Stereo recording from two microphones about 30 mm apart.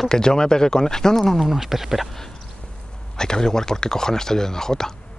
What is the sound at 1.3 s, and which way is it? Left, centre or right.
Speech, centre.